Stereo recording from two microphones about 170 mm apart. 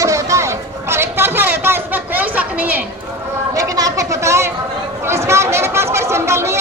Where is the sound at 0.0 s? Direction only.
20° right (ahead or behind).